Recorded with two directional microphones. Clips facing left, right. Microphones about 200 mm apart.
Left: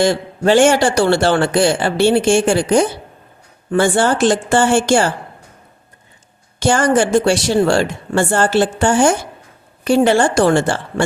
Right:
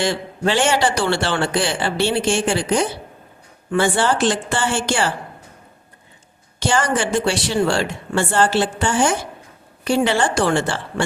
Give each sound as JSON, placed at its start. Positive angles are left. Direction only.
{"t": 0.0, "sound": "a man's voice", "side_deg": 45}
{"t": 6.6, "sound": "a man's voice", "side_deg": 45}